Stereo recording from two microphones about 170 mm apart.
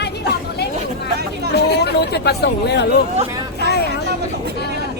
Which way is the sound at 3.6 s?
75° left (ahead or behind).